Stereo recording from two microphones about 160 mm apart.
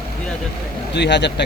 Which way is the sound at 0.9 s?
90° left.